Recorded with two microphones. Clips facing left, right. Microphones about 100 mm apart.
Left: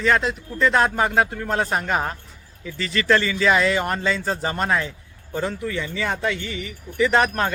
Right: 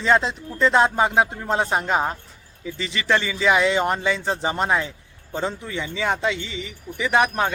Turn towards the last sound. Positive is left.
turn(degrees=-15)  # may be behind; listen again after turning